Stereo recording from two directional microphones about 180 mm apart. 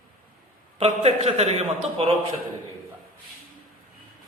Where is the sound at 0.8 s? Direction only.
35° right (ahead or behind).